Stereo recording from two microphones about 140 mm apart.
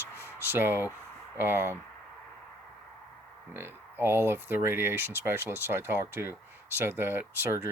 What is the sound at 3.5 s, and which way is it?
Speech, 15° right (ahead or behind).